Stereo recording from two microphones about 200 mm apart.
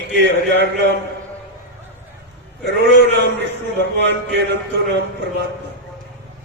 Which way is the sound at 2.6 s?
65° right (ahead or behind).